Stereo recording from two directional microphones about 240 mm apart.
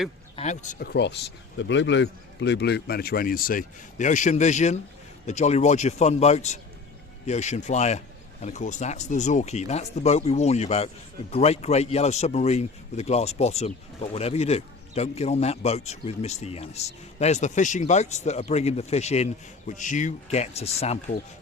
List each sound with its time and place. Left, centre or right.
0.3 s a man's voice: left